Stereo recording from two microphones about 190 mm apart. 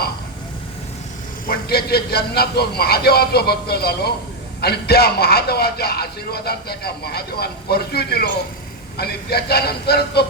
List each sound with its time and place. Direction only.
1.5 s speech: 55° left (ahead or behind)